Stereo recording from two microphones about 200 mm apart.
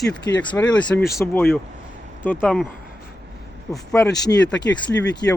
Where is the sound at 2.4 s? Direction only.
Centre (ahead or behind).